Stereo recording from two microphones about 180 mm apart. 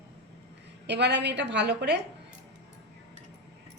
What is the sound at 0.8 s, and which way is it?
A woman's voice, 75° right (ahead or behind).